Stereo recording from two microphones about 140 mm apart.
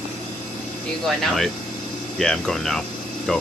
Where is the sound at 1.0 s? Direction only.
Centre (ahead or behind).